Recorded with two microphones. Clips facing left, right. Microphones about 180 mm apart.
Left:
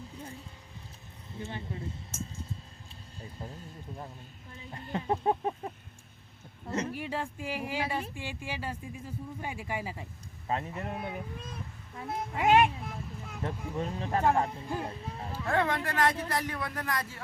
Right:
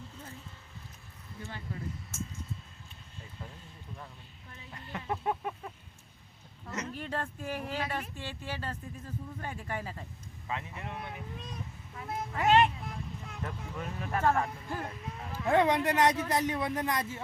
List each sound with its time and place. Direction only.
1.4 s speech: 20° left (ahead or behind)
3.2 s a sound: 40° left (ahead or behind)
6.7 s speech: 30° left (ahead or behind)
6.9 s speech: 10° left (ahead or behind)
10.4 s speech: 40° left (ahead or behind)
12.0 s speech: centre (ahead or behind)
12.3 s speech: 15° left (ahead or behind)
12.8 s vehicle: centre (ahead or behind)
13.7 s speech: 30° left (ahead or behind)
14.8 s a sound: 30° left (ahead or behind)
15.4 s speech: 20° right (ahead or behind)